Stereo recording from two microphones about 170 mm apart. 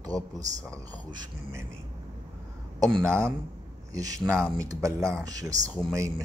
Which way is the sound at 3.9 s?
20° right (ahead or behind).